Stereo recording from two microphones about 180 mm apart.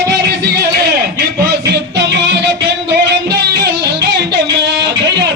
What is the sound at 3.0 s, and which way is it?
Music, 70° right (ahead or behind).